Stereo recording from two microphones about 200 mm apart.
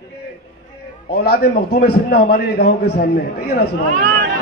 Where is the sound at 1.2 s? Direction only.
55° left (ahead or behind).